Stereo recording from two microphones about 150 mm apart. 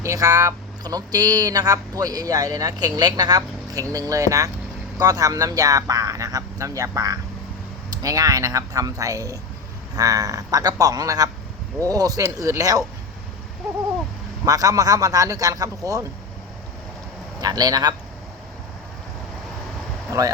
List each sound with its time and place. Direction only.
0.0 s speech: 20° right (ahead or behind)
14.4 s speech: 25° right (ahead or behind)
17.4 s speech: 25° right (ahead or behind)
20.1 s speech: 20° right (ahead or behind)